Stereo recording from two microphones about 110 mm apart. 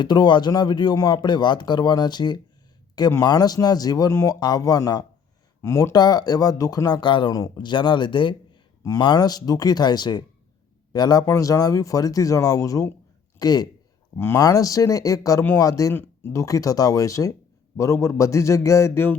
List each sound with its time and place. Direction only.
0.0 s speech: 45° left (ahead or behind)
7.3 s a man's voice: 35° left (ahead or behind)